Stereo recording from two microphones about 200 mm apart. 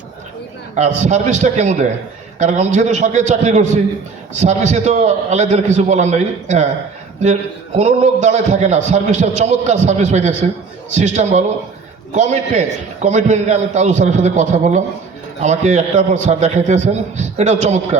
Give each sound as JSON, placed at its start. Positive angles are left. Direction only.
{"t": 0.8, "sound": "a man's voice", "side_deg": -35}
{"t": 7.8, "sound": "a man's voice", "side_deg": -35}